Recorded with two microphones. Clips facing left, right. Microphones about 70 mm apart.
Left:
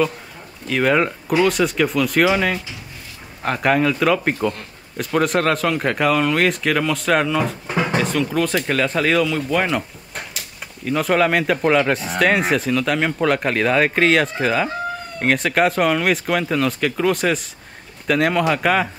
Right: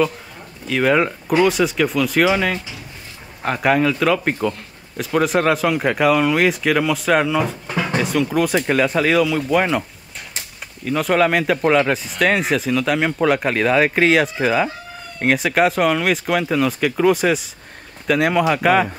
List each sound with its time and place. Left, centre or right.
0.7 s a man's voice: centre
7.6 s drawer open or close: centre
7.9 s a man's voice: centre
10.9 s a man's voice: centre